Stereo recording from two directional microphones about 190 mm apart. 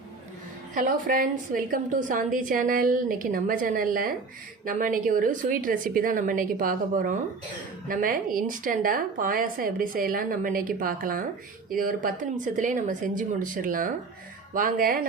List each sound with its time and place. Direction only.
0.7 s a woman's voice: 45° right (ahead or behind)